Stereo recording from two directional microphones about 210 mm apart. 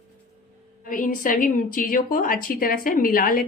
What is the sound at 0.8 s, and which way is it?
A woman's voice, 40° left (ahead or behind).